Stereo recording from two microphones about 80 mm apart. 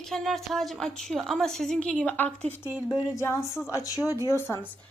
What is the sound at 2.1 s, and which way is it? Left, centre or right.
Speech, left.